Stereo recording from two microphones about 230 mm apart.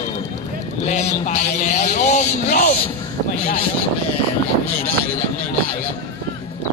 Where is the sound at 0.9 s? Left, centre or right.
Left.